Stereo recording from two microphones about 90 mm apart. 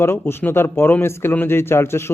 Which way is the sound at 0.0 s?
25° left (ahead or behind).